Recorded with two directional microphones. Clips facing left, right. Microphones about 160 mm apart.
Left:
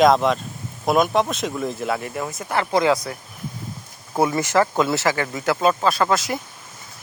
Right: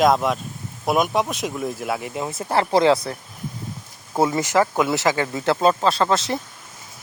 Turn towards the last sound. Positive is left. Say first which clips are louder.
# even
turn(degrees=-30)  # may be behind; listen again after turning